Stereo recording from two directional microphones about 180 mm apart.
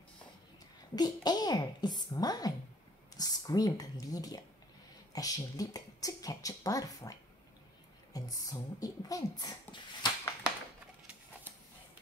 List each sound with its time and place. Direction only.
0.9 s speech: 20° left (ahead or behind)